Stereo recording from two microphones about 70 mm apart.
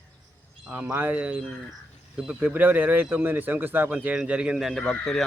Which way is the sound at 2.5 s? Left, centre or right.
Right.